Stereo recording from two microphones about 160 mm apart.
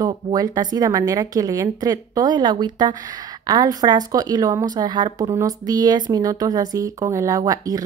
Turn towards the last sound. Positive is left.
turn(degrees=-20)  # may be behind; listen again after turning